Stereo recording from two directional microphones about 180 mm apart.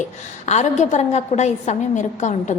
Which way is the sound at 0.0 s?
40° left (ahead or behind).